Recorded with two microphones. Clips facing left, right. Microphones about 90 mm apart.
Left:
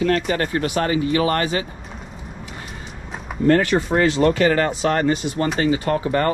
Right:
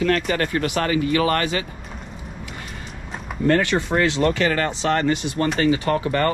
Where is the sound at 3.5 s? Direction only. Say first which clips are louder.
Left 3 dB; 40° left (ahead or behind).